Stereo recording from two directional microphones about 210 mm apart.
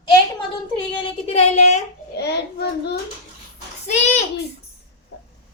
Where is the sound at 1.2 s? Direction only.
30° left (ahead or behind).